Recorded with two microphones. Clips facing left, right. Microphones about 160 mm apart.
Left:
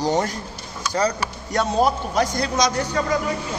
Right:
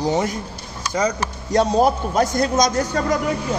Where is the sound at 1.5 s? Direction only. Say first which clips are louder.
Right 5 dB; 35° right (ahead or behind).